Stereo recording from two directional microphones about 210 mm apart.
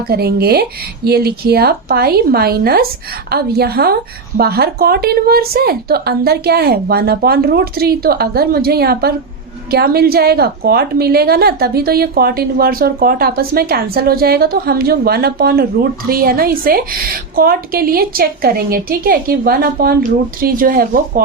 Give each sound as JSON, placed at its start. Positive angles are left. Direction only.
{"t": 0.1, "sound": "a woman's voice", "side_deg": -50}